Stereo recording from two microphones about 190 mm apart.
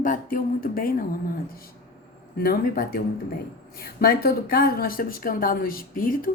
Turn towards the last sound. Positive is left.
turn(degrees=50)  # may be behind; listen again after turning